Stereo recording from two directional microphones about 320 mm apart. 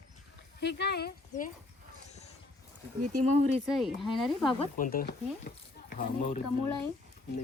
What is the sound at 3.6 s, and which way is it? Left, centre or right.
Speech, centre.